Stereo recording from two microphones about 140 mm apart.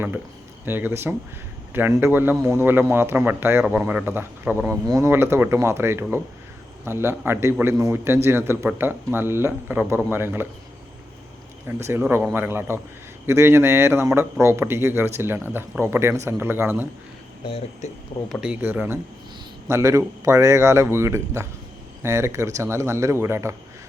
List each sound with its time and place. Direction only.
0.6 s speech: 15° right (ahead or behind)
11.8 s a man's voice: 15° right (ahead or behind)
17.8 s speech: 55° left (ahead or behind)
18.3 s a man's voice: 5° right (ahead or behind)